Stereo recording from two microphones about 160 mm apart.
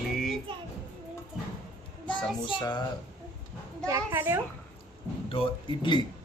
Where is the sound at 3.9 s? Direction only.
15° right (ahead or behind).